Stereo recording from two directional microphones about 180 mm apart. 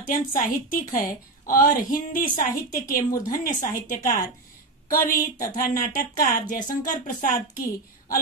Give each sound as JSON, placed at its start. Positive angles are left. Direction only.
{"t": 0.0, "sound": "a woman's voice", "side_deg": 50}